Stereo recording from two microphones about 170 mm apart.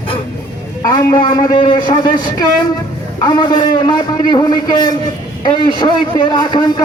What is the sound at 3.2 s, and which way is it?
A man's voice, 25° left (ahead or behind).